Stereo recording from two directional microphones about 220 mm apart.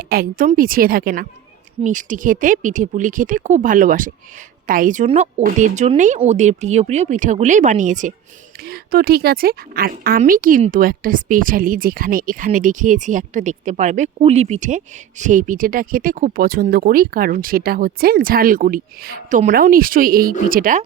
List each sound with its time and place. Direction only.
0.1 s speech: 40° right (ahead or behind)